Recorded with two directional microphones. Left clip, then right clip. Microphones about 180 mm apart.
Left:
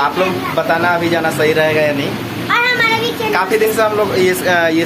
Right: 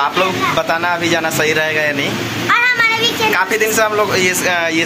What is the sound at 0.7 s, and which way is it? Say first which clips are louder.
Speech: left 2 dB; 5° right (ahead or behind).